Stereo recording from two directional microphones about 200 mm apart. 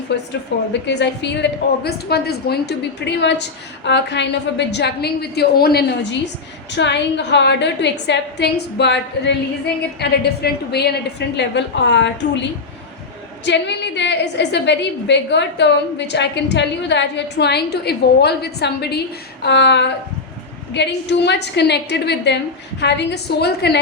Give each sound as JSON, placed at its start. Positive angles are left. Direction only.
{"t": 0.1, "sound": "a woman's voice", "side_deg": 60}